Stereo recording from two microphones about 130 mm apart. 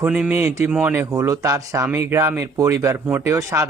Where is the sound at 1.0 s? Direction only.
25° right (ahead or behind).